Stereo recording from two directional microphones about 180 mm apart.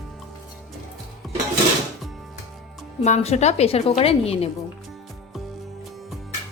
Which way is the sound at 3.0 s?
40° left (ahead or behind).